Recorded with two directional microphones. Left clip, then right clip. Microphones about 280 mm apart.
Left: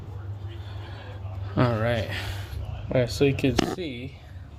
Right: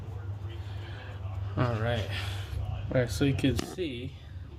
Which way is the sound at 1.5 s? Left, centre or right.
Left.